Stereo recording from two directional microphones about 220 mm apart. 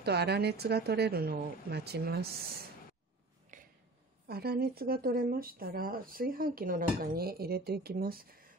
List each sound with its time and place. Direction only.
0.0 s speech: 50° right (ahead or behind)
3.5 s a sound: 35° right (ahead or behind)
4.3 s speech: 45° right (ahead or behind)